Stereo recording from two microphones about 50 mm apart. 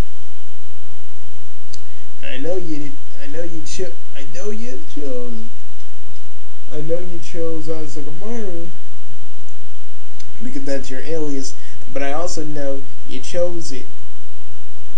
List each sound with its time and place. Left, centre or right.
2.2 s speech: centre
5.0 s speech: right
6.7 s speech: centre
10.5 s speech: centre